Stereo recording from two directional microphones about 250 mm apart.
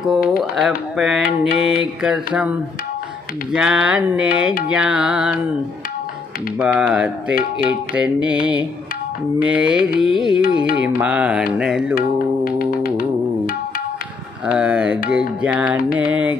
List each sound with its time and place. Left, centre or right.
0.0 s speech: centre
3.5 s speech: centre
6.6 s speech: centre
9.4 s speech: centre
12.5 s music: left
14.4 s speech: centre